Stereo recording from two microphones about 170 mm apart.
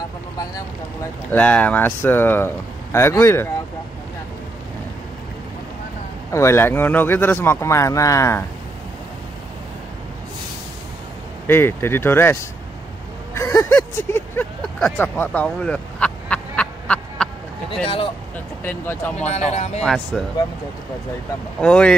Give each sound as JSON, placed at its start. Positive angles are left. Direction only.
{"t": 1.3, "sound": "speech", "side_deg": 10}
{"t": 6.3, "sound": "speech", "side_deg": 15}
{"t": 11.4, "sound": "speech", "side_deg": 15}
{"t": 14.6, "sound": "a sound", "side_deg": 5}
{"t": 17.8, "sound": "speech", "side_deg": 30}
{"t": 18.6, "sound": "speech", "side_deg": 10}
{"t": 19.1, "sound": "speech", "side_deg": 40}
{"t": 19.8, "sound": "speech", "side_deg": 5}
{"t": 21.5, "sound": "speech", "side_deg": 5}